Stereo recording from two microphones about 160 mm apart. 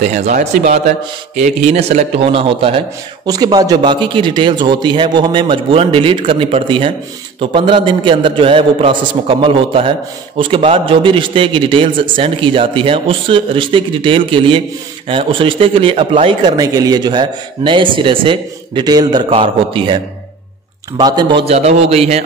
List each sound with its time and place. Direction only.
0.1 s a man's voice: 45° right (ahead or behind)
3.3 s a man's voice: 25° right (ahead or behind)
21.0 s a man's voice: 25° right (ahead or behind)
21.5 s a man's voice: 40° right (ahead or behind)